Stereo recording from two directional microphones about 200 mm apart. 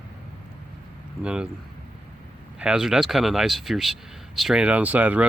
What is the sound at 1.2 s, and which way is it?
Speech, 5° right (ahead or behind).